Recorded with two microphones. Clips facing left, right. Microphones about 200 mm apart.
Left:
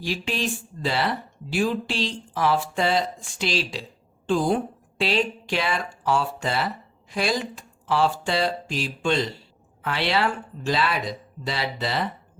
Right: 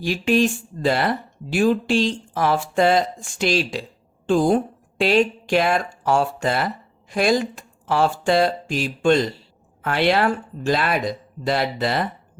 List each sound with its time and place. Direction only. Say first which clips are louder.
0.0 s speech: right 9 dB; 50° right (ahead or behind)